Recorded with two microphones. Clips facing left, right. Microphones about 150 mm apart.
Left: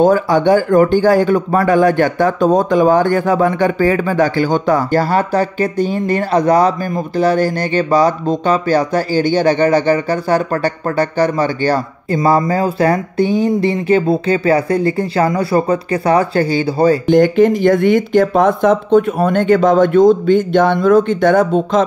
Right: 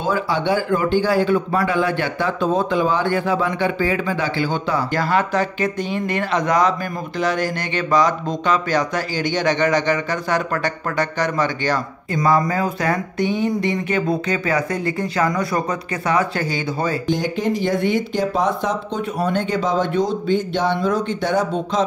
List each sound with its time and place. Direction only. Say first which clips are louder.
0.0 s a man's voice: left 9 dB; 45° left (ahead or behind)
17.1 s a man's voice: left 11 dB; 55° left (ahead or behind)